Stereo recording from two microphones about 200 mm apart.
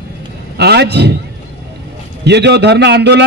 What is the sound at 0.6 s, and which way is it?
Speech, 55° right (ahead or behind).